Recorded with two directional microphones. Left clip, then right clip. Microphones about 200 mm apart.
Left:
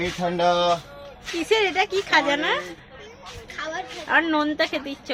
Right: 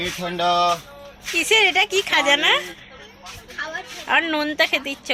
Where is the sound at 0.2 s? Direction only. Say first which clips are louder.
Right 1 dB; 25° left (ahead or behind).